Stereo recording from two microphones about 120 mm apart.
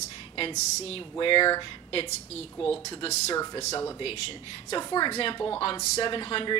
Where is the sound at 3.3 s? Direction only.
30° left (ahead or behind).